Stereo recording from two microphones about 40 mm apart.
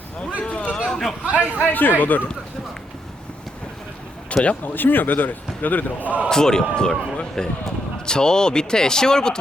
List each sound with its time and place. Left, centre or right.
0.4 s a sound: left
0.9 s chatter: centre
1.2 s speech: right
1.7 s a man's voice: left
4.6 s a man's voice: left
6.2 s speech: centre